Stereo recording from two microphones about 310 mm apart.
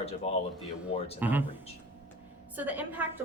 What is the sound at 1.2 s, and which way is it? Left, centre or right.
Speech, centre.